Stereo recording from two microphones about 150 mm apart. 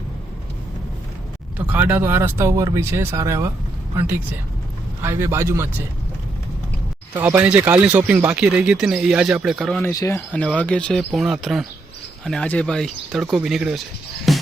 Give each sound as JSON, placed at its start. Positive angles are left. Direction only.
{"t": 1.5, "sound": "speech", "side_deg": -10}
{"t": 7.1, "sound": "speech", "side_deg": -15}
{"t": 9.8, "sound": "speech", "side_deg": 20}
{"t": 10.3, "sound": "speech", "side_deg": 5}
{"t": 14.3, "sound": "music", "side_deg": 0}